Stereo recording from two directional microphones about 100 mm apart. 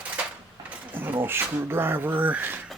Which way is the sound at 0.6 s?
20° right (ahead or behind).